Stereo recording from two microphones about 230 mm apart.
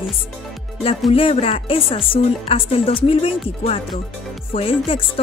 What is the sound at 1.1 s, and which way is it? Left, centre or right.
Speech, left.